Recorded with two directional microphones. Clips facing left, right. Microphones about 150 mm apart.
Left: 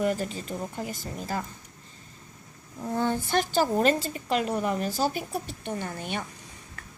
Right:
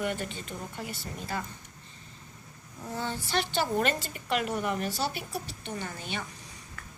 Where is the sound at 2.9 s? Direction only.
50° left (ahead or behind).